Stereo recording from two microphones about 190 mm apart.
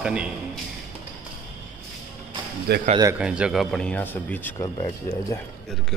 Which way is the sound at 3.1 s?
5° right (ahead or behind).